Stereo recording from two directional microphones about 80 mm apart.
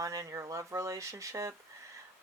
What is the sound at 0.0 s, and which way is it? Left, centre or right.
Speech, right.